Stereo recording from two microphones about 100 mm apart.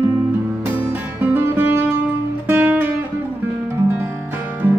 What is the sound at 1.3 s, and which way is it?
Music, 25° right (ahead or behind).